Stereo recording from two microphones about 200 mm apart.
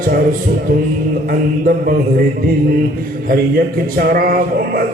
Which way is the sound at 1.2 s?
45° right (ahead or behind).